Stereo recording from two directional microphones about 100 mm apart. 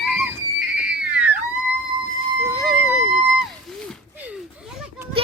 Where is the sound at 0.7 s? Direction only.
10° right (ahead or behind).